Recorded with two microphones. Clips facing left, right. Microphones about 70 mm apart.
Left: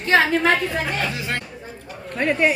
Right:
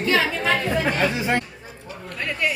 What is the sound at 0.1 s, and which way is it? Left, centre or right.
Speech, left.